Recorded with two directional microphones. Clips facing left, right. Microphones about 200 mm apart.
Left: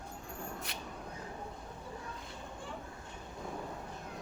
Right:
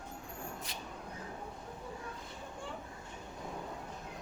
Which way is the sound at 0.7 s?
65° left (ahead or behind).